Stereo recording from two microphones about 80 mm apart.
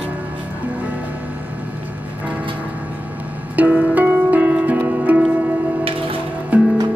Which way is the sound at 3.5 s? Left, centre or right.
Centre.